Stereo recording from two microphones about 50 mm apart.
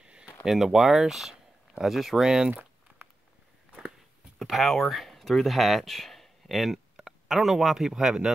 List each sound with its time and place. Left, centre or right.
0.0 s a sound: centre
0.5 s speech: centre
4.4 s speech: centre